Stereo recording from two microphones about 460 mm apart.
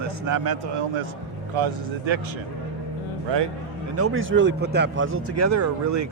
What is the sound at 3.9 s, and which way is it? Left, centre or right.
A man's voice, right.